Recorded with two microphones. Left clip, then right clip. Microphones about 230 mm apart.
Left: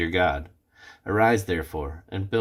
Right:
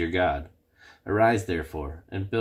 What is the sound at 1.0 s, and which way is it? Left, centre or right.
Speech, left.